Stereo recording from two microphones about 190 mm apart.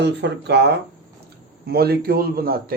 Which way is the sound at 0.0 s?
65° right (ahead or behind).